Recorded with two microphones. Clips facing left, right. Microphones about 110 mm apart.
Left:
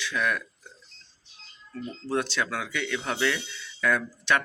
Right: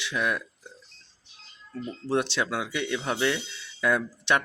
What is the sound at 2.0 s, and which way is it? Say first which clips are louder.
Speech: right 2 dB; 25° right (ahead or behind).